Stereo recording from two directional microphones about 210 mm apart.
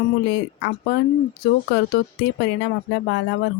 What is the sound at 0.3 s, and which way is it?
Speech, 50° left (ahead or behind).